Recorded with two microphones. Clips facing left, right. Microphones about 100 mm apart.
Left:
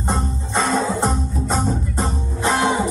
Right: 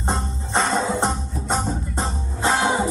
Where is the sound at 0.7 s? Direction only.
25° right (ahead or behind).